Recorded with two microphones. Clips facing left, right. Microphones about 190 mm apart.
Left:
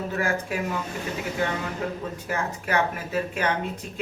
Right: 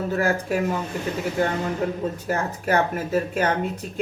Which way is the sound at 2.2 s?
40° right (ahead or behind).